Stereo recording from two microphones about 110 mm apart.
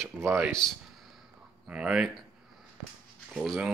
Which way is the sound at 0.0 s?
25° right (ahead or behind).